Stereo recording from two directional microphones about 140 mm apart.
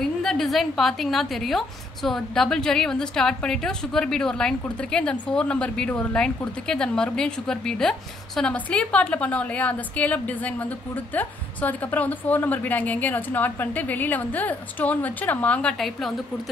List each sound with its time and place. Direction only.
0.0 s a woman's voice: 5° left (ahead or behind)